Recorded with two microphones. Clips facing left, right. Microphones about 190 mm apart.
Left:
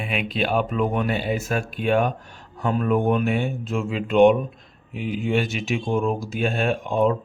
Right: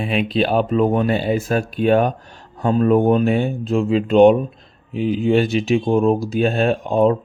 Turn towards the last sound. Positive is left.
turn(degrees=-35)  # may be behind; listen again after turning